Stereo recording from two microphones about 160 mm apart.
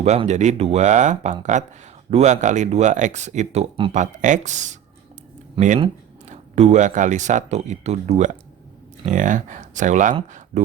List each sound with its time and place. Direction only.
0.0 s speech: 45° right (ahead or behind)
3.9 s speech: 50° right (ahead or behind)